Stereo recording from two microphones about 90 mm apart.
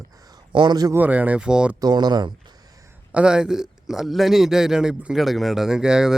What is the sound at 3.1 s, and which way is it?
A man's voice, 10° right (ahead or behind).